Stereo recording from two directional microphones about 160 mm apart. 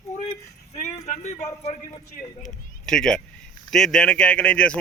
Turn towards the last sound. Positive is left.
turn(degrees=5)  # may be behind; listen again after turning